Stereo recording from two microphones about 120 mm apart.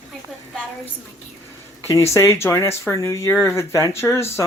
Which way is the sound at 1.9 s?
20° left (ahead or behind).